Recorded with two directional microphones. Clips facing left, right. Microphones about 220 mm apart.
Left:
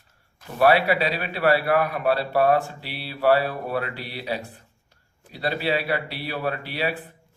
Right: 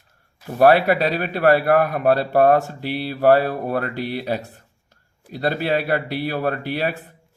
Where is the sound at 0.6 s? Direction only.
50° right (ahead or behind).